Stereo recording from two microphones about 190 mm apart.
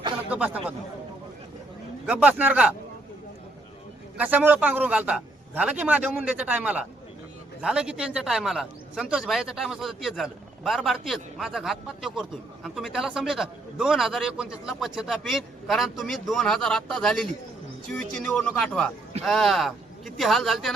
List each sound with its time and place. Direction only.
0.3 s speech: 5° right (ahead or behind)
2.0 s a man's voice: 5° right (ahead or behind)
4.2 s a man's voice: 10° right (ahead or behind)